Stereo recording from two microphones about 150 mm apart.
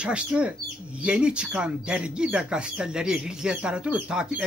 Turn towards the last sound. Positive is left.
turn(degrees=-5)  # may be behind; listen again after turning